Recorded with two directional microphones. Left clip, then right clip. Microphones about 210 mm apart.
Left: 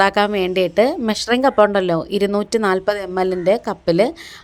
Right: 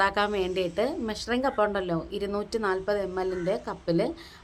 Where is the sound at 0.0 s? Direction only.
30° left (ahead or behind).